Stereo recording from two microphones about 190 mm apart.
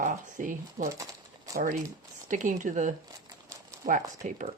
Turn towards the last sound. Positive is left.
turn(degrees=-45)  # may be behind; listen again after turning